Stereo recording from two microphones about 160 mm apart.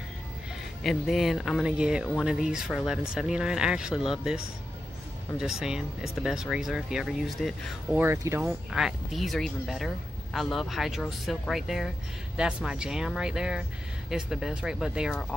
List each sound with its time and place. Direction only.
0.8 s speech: centre (ahead or behind)
5.4 s speech: 5° right (ahead or behind)
7.9 s speech: 15° right (ahead or behind)
8.4 s speech: 5° right (ahead or behind)